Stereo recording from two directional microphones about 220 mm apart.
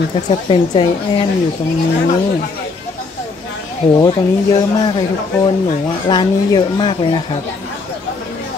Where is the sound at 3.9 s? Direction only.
15° left (ahead or behind).